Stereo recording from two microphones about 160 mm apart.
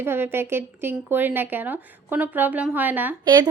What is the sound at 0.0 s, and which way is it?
Speech, 15° right (ahead or behind).